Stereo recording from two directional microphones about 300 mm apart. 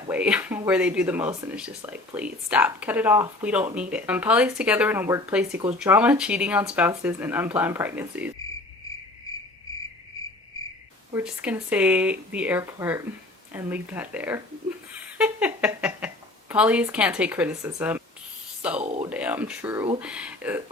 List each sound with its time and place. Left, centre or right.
0.1 s speech: centre
11.1 s speech: centre
18.8 s speech: right
19.1 s speech: centre